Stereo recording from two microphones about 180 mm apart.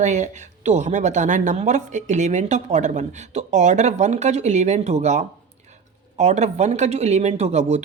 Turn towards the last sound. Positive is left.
turn(degrees=-35)  # may be behind; listen again after turning